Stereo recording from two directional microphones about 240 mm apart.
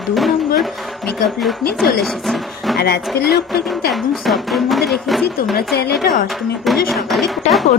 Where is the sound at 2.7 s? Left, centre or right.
Left.